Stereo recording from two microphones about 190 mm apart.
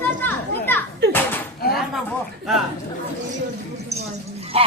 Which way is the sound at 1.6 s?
55° left (ahead or behind).